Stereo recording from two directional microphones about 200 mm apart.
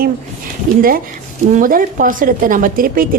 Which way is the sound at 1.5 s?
40° right (ahead or behind).